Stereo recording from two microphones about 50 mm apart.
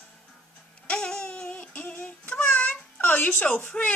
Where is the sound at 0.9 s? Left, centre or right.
Centre.